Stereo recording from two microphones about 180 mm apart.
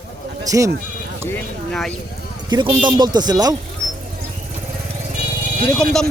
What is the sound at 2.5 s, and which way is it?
Speech, 25° right (ahead or behind).